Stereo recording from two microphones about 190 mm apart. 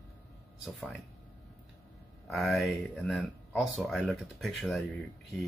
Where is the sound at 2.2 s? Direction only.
Centre (ahead or behind).